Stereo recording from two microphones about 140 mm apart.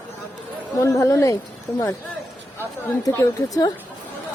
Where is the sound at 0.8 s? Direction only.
20° left (ahead or behind).